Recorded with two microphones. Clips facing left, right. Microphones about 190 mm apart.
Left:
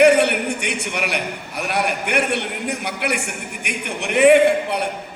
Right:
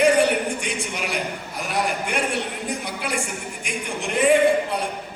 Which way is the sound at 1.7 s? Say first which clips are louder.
Left 3 dB; 65° left (ahead or behind).